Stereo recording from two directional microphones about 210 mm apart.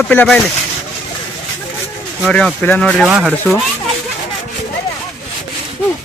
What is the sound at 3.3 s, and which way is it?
Speech, 5° left (ahead or behind).